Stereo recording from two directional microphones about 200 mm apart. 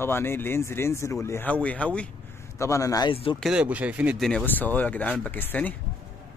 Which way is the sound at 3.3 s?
5° right (ahead or behind).